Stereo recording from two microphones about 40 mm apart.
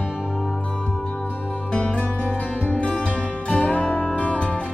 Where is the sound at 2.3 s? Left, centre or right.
Left.